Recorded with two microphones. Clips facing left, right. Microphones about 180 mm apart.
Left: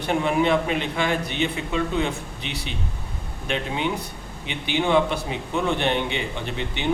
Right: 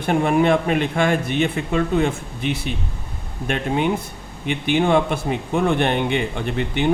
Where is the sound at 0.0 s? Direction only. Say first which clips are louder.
Right 4 dB; 50° right (ahead or behind).